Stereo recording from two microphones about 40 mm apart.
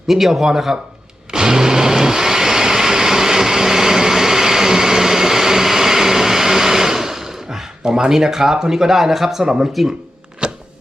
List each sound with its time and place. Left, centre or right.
0.1 s speech: centre
1.3 s vehicle: centre
9.4 s speech: centre
10.4 s a sound: right